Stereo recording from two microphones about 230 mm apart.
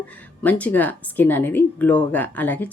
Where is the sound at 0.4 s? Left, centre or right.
Centre.